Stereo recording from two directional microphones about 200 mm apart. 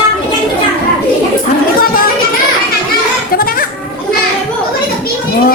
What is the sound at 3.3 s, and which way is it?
Children playing, 45° left (ahead or behind).